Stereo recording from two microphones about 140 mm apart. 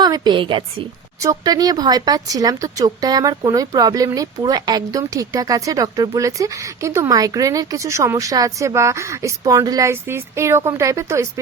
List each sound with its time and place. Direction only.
0.0 s a woman's voice: 30° right (ahead or behind)
1.2 s speech: 25° right (ahead or behind)